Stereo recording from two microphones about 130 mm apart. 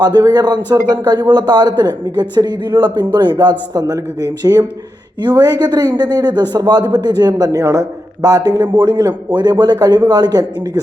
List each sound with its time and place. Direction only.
0.0 s a man's voice: 30° right (ahead or behind)
5.2 s a man's voice: 35° right (ahead or behind)